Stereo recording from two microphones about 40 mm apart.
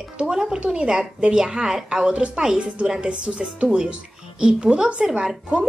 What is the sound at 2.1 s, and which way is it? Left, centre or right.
A woman's voice, right.